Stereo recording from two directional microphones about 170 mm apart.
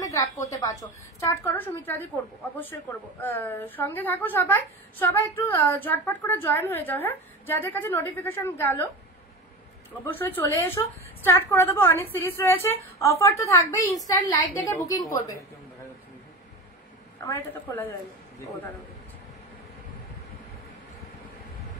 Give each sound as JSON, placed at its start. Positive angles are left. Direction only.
{"t": 0.0, "sound": "a woman's voice", "side_deg": 20}
{"t": 10.0, "sound": "a woman's voice", "side_deg": 10}
{"t": 17.5, "sound": "a woman's voice", "side_deg": 10}